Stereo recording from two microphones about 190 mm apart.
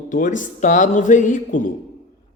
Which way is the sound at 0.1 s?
45° left (ahead or behind).